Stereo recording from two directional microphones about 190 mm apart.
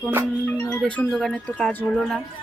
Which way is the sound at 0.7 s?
10° left (ahead or behind).